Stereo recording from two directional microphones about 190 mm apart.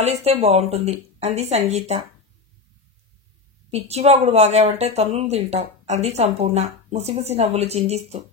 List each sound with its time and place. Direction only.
0.0 s a woman's voice: 35° right (ahead or behind)
3.7 s a woman's voice: 35° right (ahead or behind)